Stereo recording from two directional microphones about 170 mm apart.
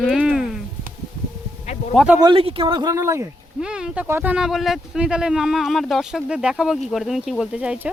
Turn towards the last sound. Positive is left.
turn(degrees=-5)  # may be behind; listen again after turning